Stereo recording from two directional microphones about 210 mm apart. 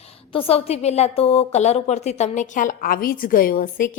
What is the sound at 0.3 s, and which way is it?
A woman's voice, 30° left (ahead or behind).